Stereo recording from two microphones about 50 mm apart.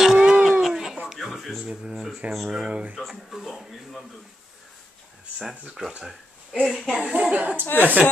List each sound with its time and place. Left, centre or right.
0.0 s a sound: centre
1.0 s music: centre
1.7 s a woman's voice: centre
3.0 s a man's voice: centre
5.4 s speech: centre
6.6 s speech: centre
7.0 s a woman's voice: right
7.6 s speech: left